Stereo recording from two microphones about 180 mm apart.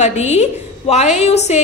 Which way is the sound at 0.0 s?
35° left (ahead or behind).